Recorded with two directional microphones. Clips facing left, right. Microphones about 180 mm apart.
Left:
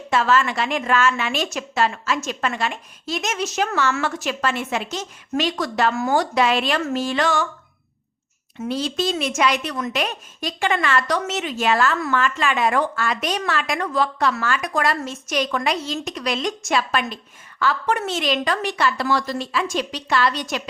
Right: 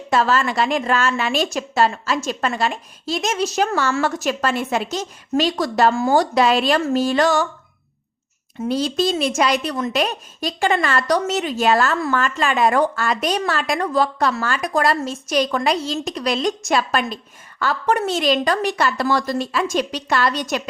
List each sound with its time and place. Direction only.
0.1 s speech: 40° right (ahead or behind)
8.6 s a woman's voice: 40° right (ahead or behind)